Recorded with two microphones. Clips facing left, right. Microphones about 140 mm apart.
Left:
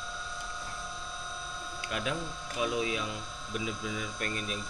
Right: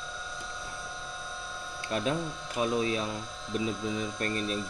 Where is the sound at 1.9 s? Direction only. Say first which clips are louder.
Right 5 dB; 35° right (ahead or behind).